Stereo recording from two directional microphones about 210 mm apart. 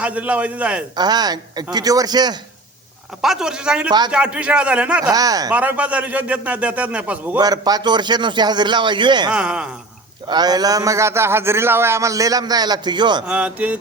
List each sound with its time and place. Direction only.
0.0 s a man's voice: 5° right (ahead or behind)
0.9 s a man's voice: 20° right (ahead or behind)
3.2 s speech: centre (ahead or behind)
5.1 s a man's voice: 15° right (ahead or behind)
5.5 s a man's voice: 5° right (ahead or behind)
7.3 s a man's voice: 20° right (ahead or behind)
9.3 s speech: 5° right (ahead or behind)
10.2 s a man's voice: 20° right (ahead or behind)
13.2 s a man's voice: 5° right (ahead or behind)